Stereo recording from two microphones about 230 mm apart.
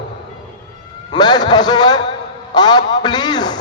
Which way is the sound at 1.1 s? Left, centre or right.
Centre.